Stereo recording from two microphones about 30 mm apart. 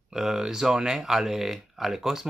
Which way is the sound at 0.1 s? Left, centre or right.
Centre.